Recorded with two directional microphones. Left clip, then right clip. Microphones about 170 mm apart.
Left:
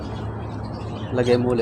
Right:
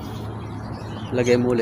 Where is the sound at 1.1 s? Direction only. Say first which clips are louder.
Even; 20° right (ahead or behind).